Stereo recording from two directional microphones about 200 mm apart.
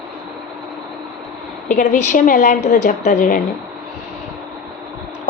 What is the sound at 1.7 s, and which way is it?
A woman's voice, 40° left (ahead or behind).